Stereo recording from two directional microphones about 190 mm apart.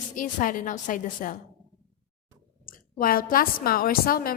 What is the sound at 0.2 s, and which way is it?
A woman's voice, 45° left (ahead or behind).